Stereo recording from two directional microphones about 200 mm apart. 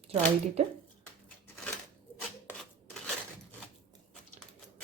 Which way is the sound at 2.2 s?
5° left (ahead or behind).